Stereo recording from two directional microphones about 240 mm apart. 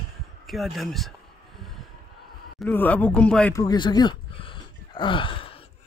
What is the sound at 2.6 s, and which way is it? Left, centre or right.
Speech, centre.